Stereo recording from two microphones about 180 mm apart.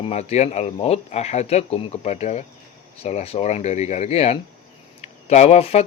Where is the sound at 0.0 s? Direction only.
35° left (ahead or behind).